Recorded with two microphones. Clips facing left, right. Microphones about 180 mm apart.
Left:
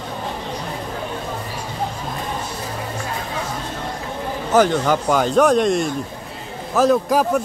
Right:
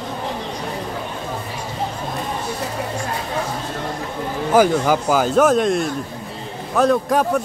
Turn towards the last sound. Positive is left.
turn(degrees=0)  # may be behind; listen again after turning